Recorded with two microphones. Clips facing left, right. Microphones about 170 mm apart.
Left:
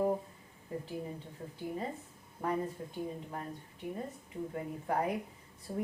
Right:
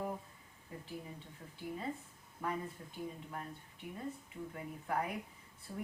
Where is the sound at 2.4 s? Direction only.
40° left (ahead or behind).